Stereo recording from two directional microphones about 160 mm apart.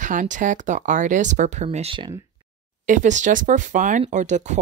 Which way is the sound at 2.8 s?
50° right (ahead or behind).